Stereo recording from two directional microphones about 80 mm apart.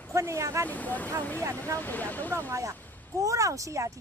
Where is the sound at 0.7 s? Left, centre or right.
Centre.